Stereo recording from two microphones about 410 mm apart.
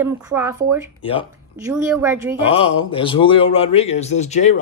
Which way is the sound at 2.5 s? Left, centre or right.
Centre.